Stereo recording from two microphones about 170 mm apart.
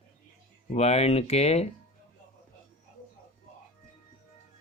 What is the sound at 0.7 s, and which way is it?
Speech, 40° left (ahead or behind).